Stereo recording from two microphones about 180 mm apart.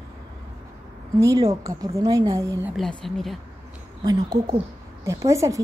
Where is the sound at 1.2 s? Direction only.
15° right (ahead or behind).